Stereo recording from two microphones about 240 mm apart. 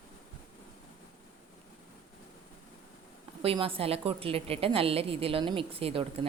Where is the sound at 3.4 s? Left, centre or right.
Right.